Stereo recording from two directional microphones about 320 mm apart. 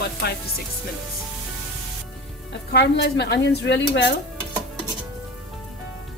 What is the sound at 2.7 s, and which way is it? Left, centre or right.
A woman's voice, left.